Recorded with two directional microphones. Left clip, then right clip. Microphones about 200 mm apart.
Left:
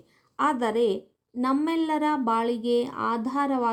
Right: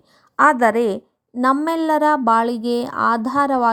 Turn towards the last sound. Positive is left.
turn(degrees=-45)  # may be behind; listen again after turning